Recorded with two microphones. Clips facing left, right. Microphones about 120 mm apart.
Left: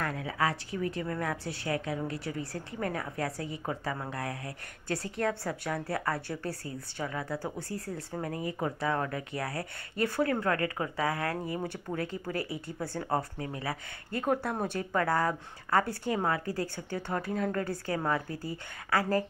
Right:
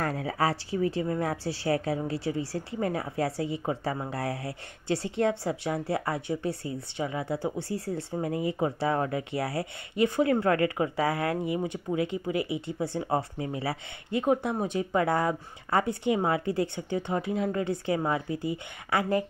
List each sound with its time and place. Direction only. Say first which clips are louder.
0.0 s a woman's voice: right 3 dB; 35° right (ahead or behind)
11.5 s a woman's voice: right 5 dB; 15° right (ahead or behind)
14.2 s a woman's voice: right 3 dB; 15° right (ahead or behind)